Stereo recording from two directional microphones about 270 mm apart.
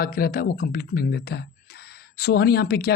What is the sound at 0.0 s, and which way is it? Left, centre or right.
Speech, left.